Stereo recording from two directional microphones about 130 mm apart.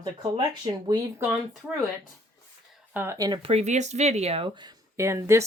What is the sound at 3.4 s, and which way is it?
Speech, 55° right (ahead or behind).